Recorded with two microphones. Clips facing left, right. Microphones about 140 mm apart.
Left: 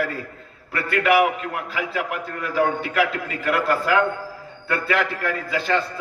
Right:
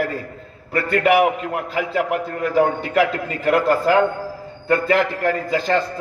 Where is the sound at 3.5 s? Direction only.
40° right (ahead or behind).